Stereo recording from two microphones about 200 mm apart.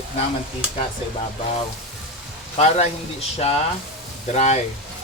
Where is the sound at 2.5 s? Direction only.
30° left (ahead or behind).